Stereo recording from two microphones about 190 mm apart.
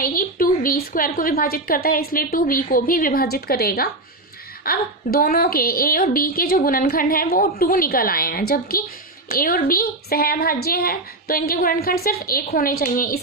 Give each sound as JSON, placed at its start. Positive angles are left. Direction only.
{"t": 0.0, "sound": "a woman's voice", "side_deg": 50}